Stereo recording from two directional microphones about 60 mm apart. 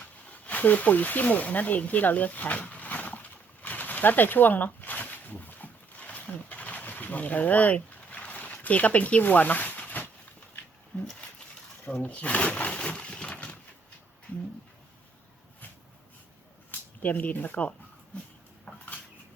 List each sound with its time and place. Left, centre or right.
0.3 s snake: left
10.9 s speech: left
12.0 s a sound: left
17.0 s speech: left